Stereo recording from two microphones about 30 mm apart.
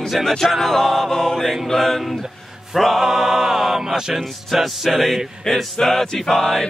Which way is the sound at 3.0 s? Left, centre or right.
Centre.